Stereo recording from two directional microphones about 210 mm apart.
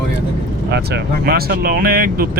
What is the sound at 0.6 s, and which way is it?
Speech, 50° right (ahead or behind).